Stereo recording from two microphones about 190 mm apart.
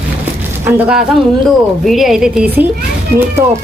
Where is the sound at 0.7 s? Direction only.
10° right (ahead or behind).